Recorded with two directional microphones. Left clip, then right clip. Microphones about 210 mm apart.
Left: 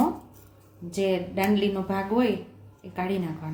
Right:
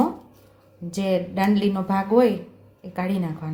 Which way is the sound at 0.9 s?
30° right (ahead or behind).